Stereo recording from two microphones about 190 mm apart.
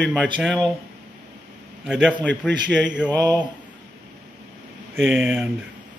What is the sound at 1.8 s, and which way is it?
Speech, centre (ahead or behind).